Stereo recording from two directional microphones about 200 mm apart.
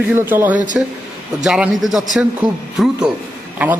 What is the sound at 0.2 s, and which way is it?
A man's voice, 10° right (ahead or behind).